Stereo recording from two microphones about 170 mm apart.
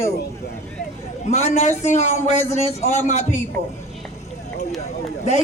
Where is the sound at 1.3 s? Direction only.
40° left (ahead or behind).